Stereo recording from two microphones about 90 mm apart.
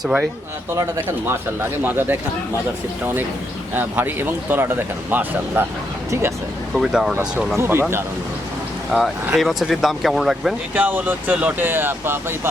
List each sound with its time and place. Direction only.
0.8 s speech: 35° right (ahead or behind)
1.8 s speech: 20° right (ahead or behind)
3.8 s speech: 20° right (ahead or behind)
6.7 s speech: 5° right (ahead or behind)
7.5 s speech: 25° right (ahead or behind)
8.9 s speech: centre (ahead or behind)
10.8 s speech: 20° right (ahead or behind)